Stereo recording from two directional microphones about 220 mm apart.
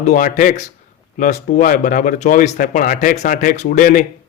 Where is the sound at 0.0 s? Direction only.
35° left (ahead or behind).